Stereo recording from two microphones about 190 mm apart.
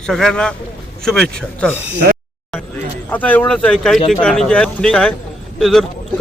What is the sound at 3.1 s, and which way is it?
Speech, 10° left (ahead or behind).